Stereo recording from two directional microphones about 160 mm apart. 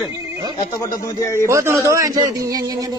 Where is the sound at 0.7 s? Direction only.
20° left (ahead or behind).